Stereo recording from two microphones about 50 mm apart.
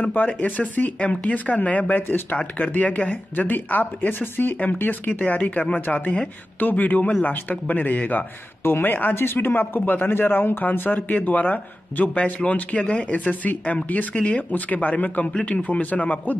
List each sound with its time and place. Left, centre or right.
0.0 s speech: left
2.0 s speech: left
2.3 s speech: left
8.6 s speech: left